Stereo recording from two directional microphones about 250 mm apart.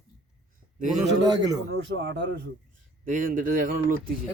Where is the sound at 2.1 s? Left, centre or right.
Right.